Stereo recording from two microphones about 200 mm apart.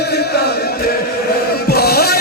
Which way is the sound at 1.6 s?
50° left (ahead or behind).